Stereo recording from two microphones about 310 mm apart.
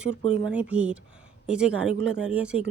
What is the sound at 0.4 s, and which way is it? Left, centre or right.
A woman's voice, centre.